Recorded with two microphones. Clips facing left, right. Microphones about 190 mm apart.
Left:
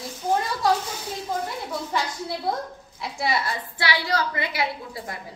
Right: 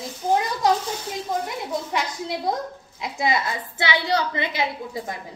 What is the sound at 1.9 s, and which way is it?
A woman's voice, 20° right (ahead or behind).